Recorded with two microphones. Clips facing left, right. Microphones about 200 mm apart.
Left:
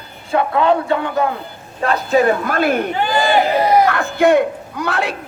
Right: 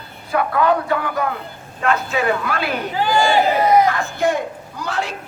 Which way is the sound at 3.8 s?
65° left (ahead or behind).